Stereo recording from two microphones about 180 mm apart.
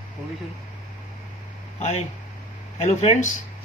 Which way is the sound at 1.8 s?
40° left (ahead or behind).